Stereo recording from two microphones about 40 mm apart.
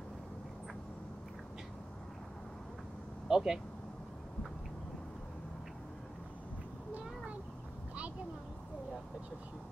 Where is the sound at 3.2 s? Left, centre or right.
Centre.